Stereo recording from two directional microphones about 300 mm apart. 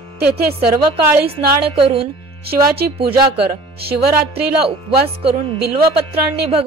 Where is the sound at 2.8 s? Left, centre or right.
Right.